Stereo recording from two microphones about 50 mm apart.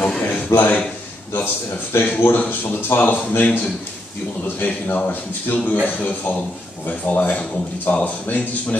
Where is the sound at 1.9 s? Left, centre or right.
Left.